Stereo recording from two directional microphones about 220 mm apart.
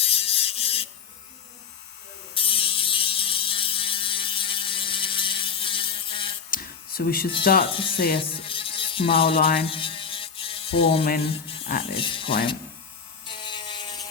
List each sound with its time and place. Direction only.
0.0 s electric toothbrush: 25° left (ahead or behind)
2.3 s a sound: 25° left (ahead or behind)
6.5 s a sound: 40° left (ahead or behind)
7.6 s speech: 25° left (ahead or behind)
7.9 s speech: 45° left (ahead or behind)
8.2 s music: 25° left (ahead or behind)
9.4 s speech: 45° left (ahead or behind)
9.6 s ratchet: 25° left (ahead or behind)
11.2 s speech: 25° left (ahead or behind)
13.2 s a sound: 20° left (ahead or behind)